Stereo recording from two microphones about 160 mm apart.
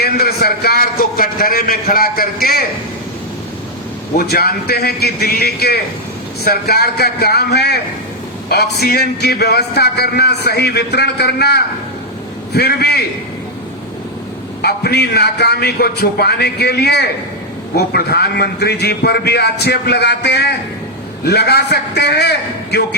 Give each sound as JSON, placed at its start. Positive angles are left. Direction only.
{"t": 0.0, "sound": "a man's voice", "side_deg": 80}
{"t": 4.2, "sound": "a man's voice", "side_deg": 70}
{"t": 14.6, "sound": "a man's voice", "side_deg": 80}